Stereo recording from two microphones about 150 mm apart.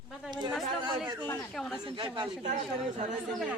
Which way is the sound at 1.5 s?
5° left (ahead or behind).